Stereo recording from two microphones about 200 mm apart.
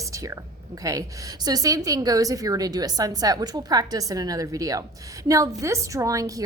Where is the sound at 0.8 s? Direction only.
15° right (ahead or behind).